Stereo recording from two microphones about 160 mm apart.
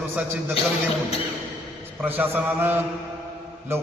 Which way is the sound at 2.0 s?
10° right (ahead or behind).